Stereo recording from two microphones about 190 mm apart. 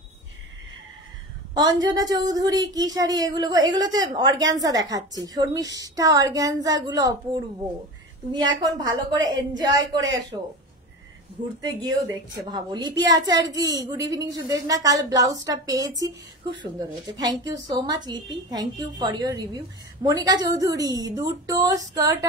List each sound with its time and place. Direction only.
1.6 s a woman's voice: 20° right (ahead or behind)
8.3 s a woman's voice: 25° right (ahead or behind)
11.6 s a woman's voice: 20° right (ahead or behind)
17.2 s a woman's voice: 20° right (ahead or behind)